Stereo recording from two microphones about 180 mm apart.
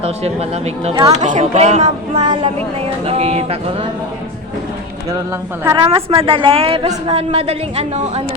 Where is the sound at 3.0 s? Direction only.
35° right (ahead or behind).